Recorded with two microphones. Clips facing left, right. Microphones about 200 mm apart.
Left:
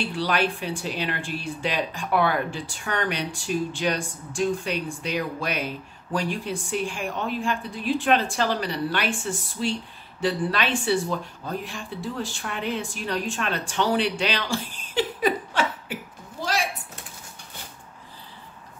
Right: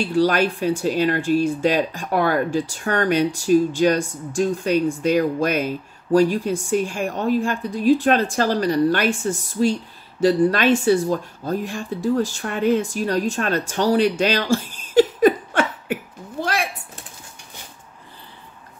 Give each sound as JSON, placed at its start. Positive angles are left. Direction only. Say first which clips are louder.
{"t": 0.1, "sound": "speech", "louder": "right 7 dB", "side_deg": -45}